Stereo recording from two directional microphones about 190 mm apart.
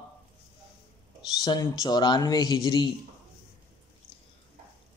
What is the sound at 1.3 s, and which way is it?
A man's voice, 20° left (ahead or behind).